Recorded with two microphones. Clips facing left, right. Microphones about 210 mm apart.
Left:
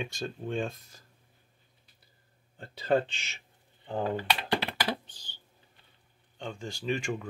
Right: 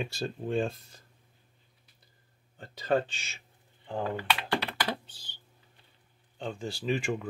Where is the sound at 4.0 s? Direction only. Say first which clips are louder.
Left 1 dB; 35° left (ahead or behind).